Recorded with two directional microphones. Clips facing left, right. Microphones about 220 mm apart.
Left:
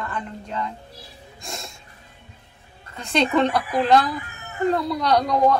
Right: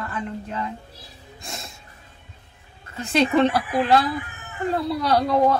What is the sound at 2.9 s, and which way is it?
Speech, 5° right (ahead or behind).